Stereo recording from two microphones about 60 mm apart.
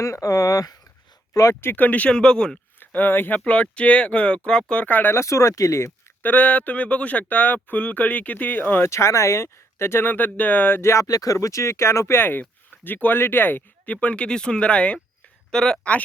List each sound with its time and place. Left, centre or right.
0.0 s speech: left
1.3 s speech: left
1.6 s speech: left
2.0 s speech: centre
2.8 s speech: left
5.1 s speech: left
6.2 s speech: left
8.8 s speech: left
10.9 s speech: left
13.8 s speech: left